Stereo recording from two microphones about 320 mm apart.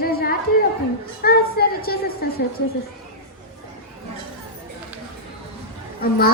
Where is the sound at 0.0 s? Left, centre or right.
Left.